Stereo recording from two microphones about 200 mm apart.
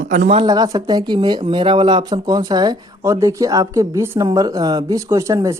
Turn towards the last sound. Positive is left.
turn(degrees=-15)  # may be behind; listen again after turning